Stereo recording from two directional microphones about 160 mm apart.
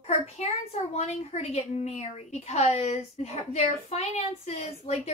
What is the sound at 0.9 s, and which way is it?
Speech, 45° left (ahead or behind).